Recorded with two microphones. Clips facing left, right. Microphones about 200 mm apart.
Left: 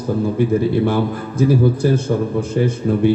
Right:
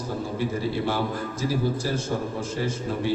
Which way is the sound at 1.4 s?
60° left (ahead or behind).